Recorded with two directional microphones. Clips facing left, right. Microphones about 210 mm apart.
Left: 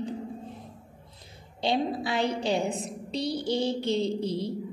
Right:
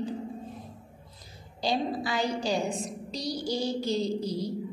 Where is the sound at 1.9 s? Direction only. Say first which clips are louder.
Left 1 dB; 60° left (ahead or behind).